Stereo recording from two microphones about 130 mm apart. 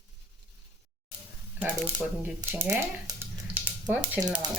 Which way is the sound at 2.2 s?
15° right (ahead or behind).